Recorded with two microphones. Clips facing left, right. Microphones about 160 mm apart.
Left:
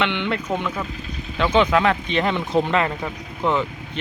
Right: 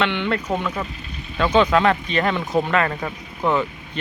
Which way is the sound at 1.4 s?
15° left (ahead or behind).